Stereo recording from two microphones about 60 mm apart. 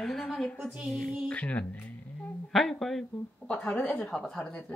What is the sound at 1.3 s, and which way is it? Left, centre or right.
Speech, left.